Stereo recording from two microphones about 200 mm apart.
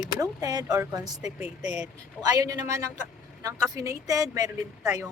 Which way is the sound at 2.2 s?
20° right (ahead or behind).